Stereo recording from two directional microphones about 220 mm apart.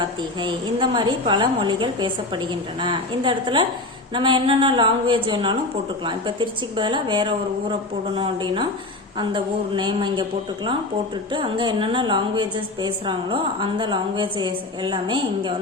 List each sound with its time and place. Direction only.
0.0 s a woman's voice: 20° right (ahead or behind)